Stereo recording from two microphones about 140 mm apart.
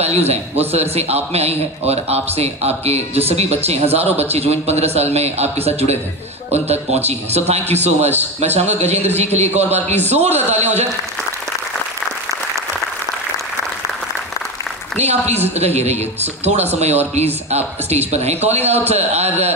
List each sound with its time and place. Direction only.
0.0 s a man's voice: 50° right (ahead or behind)
15.0 s a man's voice: 50° right (ahead or behind)